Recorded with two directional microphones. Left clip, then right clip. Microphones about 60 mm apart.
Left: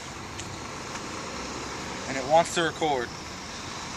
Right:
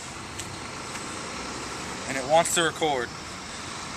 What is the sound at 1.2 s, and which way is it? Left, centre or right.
Vehicle, left.